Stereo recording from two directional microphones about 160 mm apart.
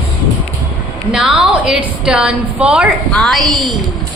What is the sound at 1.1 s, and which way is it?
A woman's voice, 5° right (ahead or behind).